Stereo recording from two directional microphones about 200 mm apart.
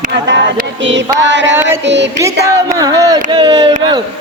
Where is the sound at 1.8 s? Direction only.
60° right (ahead or behind).